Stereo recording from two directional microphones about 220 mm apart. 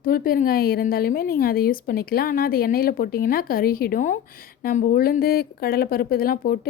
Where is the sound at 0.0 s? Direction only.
40° left (ahead or behind).